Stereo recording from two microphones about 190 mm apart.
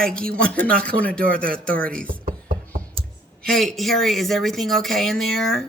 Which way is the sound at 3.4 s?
5° left (ahead or behind).